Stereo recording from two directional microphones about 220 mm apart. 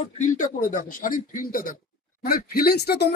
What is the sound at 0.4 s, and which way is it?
Speech, 35° left (ahead or behind).